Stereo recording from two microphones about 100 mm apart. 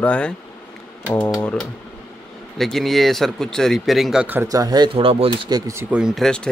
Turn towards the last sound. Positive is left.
turn(degrees=10)  # may be behind; listen again after turning